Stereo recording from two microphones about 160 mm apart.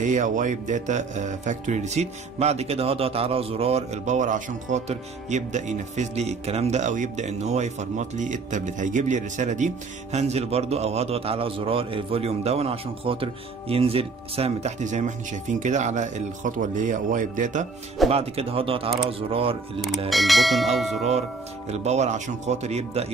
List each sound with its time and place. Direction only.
0.0 s a man's voice: 50° right (ahead or behind)
18.1 s a man's voice: 40° right (ahead or behind)
20.1 s church bell: centre (ahead or behind)
21.6 s speech: 45° right (ahead or behind)